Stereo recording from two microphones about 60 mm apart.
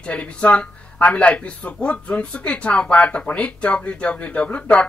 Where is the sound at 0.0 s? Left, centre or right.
Centre.